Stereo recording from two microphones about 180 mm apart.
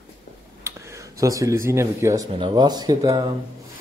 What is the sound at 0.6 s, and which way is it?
Speech, 15° right (ahead or behind).